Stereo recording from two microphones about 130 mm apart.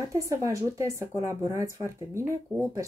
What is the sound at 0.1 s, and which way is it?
Speech, 25° right (ahead or behind).